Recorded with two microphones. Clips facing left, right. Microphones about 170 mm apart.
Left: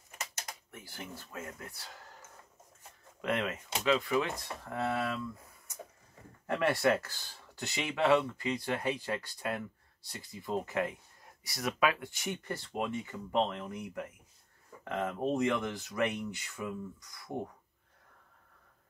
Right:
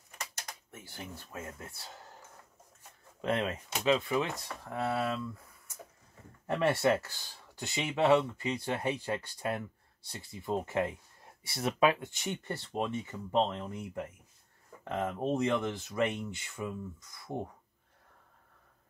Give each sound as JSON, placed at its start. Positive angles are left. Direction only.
{"t": 0.7, "sound": "speech", "side_deg": -25}
{"t": 3.2, "sound": "speech", "side_deg": -30}
{"t": 6.4, "sound": "speech", "side_deg": -20}
{"t": 14.9, "sound": "speech", "side_deg": -15}